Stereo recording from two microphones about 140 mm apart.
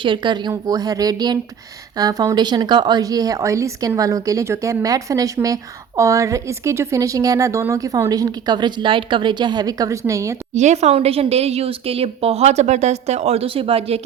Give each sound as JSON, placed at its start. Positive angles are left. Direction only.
{"t": 0.0, "sound": "speech", "side_deg": -35}
{"t": 10.5, "sound": "a woman's voice", "side_deg": -55}